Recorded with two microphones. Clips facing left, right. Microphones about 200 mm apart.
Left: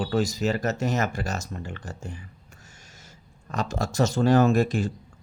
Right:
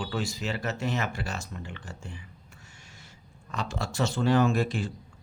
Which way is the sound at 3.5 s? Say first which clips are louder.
Left 5 dB; 45° left (ahead or behind).